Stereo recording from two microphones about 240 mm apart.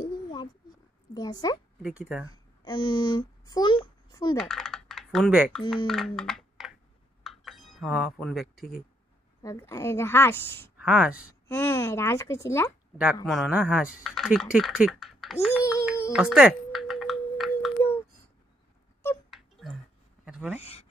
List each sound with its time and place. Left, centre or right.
0.0 s a sound: centre
1.1 s a woman's voice: centre
1.8 s speech: centre
2.3 s a child's voice: centre
4.4 s speech: centre
5.9 s typing: centre
7.2 s dishes: centre
9.4 s a woman's voice: centre
10.8 s speech: centre
11.4 s a woman's voice: centre
12.9 s speech: centre
16.1 s typing: centre
19.3 s a sound: centre